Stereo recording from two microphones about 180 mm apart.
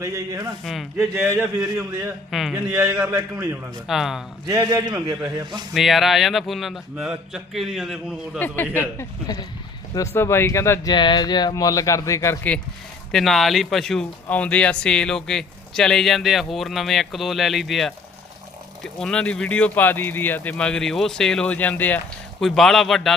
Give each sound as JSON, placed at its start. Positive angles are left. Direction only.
{"t": 0.0, "sound": "a man's voice", "side_deg": -20}
{"t": 0.6, "sound": "speech", "side_deg": 0}
{"t": 0.9, "sound": "a man's voice", "side_deg": -15}
{"t": 2.3, "sound": "a man's voice", "side_deg": 0}
{"t": 4.4, "sound": "a man's voice", "side_deg": -20}
{"t": 5.7, "sound": "speech", "side_deg": 0}
{"t": 8.4, "sound": "speech", "side_deg": 10}
{"t": 9.0, "sound": "speech", "side_deg": 20}
{"t": 13.1, "sound": "speech", "side_deg": 0}